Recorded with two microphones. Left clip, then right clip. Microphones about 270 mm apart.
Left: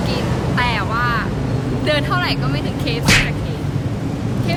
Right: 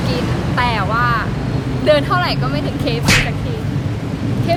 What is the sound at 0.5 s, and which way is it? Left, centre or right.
Speech, centre.